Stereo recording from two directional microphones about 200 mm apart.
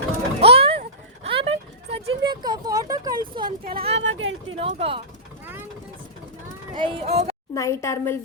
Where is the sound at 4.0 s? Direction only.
70° right (ahead or behind).